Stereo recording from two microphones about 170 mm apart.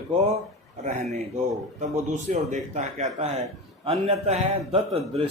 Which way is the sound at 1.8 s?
45° right (ahead or behind).